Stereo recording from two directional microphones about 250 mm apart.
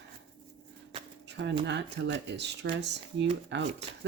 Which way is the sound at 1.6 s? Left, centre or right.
Right.